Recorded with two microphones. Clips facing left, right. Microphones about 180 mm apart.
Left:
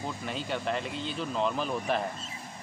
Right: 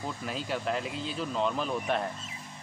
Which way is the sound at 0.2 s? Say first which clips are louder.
Right 1 dB; centre (ahead or behind).